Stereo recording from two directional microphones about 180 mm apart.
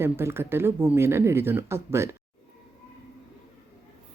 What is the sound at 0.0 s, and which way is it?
Speech, 15° right (ahead or behind).